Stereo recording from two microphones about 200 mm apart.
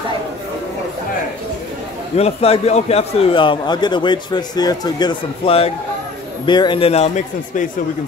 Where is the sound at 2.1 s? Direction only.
30° left (ahead or behind).